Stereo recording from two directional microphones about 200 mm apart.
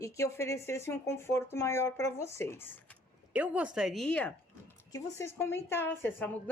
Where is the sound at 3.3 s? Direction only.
5° right (ahead or behind).